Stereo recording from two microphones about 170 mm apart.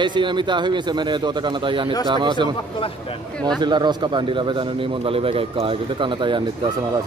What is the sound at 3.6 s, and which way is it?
Speech, 25° right (ahead or behind).